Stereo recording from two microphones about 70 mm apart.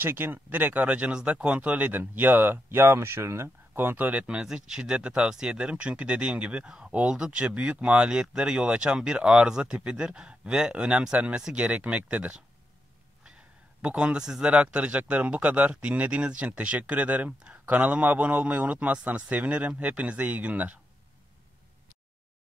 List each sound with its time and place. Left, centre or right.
0.0 s speech: right
3.4 s speech: right